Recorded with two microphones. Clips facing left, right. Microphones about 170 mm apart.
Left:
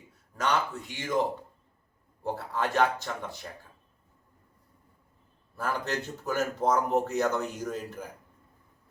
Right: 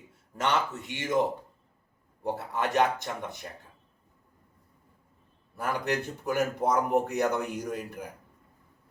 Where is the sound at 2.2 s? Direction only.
20° right (ahead or behind).